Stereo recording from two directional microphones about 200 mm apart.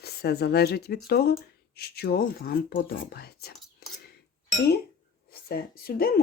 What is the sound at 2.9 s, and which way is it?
Speech, 60° left (ahead or behind).